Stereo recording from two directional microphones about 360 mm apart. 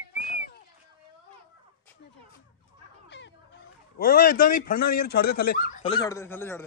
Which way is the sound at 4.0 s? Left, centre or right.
Left.